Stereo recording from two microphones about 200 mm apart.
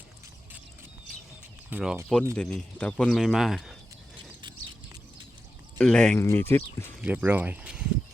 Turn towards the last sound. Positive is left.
turn(degrees=-5)  # may be behind; listen again after turning